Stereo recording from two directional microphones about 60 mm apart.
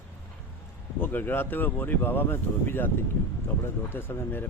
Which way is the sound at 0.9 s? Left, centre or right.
Left.